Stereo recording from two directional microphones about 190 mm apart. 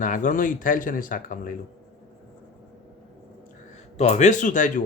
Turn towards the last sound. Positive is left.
turn(degrees=45)  # may be behind; listen again after turning